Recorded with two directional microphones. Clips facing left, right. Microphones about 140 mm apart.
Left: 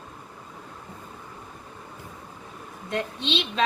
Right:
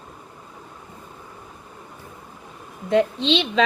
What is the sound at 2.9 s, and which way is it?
Speech, 90° right.